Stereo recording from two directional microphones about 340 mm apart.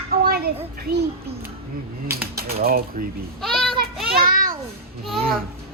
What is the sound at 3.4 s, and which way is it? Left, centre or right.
Child singing, centre.